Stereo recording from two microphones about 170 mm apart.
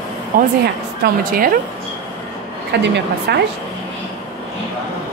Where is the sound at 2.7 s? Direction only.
75° right (ahead or behind).